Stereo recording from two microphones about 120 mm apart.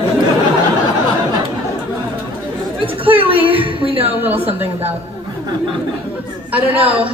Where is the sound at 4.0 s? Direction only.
15° right (ahead or behind).